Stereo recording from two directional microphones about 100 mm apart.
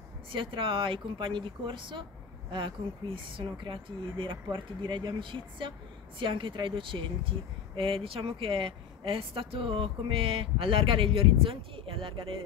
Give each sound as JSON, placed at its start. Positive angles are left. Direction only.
{"t": 0.3, "sound": "speech", "side_deg": -60}